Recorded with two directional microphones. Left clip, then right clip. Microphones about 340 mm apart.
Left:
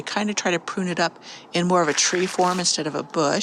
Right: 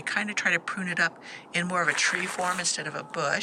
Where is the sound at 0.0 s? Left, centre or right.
Centre.